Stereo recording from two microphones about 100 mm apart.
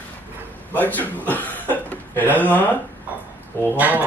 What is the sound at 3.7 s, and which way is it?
Speech, 15° right (ahead or behind).